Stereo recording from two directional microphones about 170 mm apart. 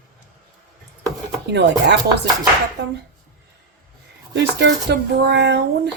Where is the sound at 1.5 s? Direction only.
90° right.